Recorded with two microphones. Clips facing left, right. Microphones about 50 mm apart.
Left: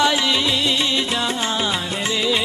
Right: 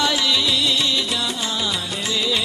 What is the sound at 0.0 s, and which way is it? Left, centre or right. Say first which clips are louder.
Music: left 2 dB; left.